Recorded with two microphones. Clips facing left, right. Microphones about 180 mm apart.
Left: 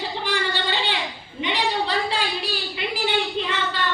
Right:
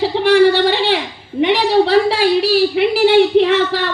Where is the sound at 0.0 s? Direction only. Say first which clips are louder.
Right 16 dB; 70° right (ahead or behind).